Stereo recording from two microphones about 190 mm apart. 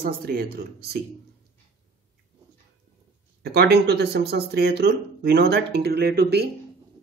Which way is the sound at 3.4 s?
60° right (ahead or behind).